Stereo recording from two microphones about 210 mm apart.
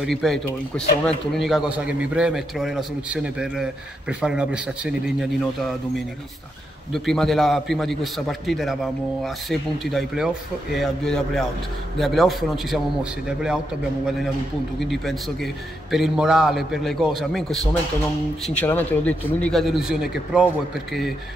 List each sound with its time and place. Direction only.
0.0 s a man's voice: centre (ahead or behind)
6.9 s a man's voice: centre (ahead or behind)
14.8 s a man's voice: centre (ahead or behind)